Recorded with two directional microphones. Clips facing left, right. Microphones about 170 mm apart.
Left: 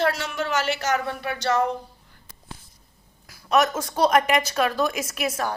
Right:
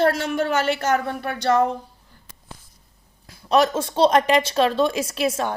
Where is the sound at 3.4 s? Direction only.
30° right (ahead or behind).